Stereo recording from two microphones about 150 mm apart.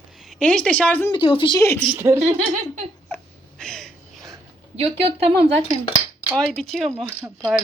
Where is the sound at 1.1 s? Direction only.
35° left (ahead or behind).